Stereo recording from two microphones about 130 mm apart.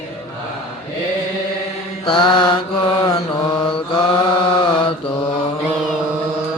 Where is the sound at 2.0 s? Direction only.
40° left (ahead or behind).